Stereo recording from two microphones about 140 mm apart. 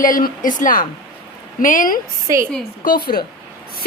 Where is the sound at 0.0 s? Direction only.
75° left (ahead or behind).